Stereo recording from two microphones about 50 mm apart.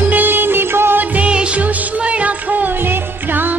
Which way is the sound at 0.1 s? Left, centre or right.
Right.